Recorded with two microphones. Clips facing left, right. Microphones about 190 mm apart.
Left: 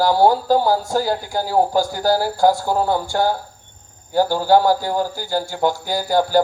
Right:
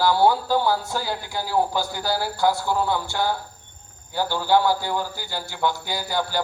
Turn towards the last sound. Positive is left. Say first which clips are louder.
# left 9 dB
turn(degrees=45)  # may be behind; listen again after turning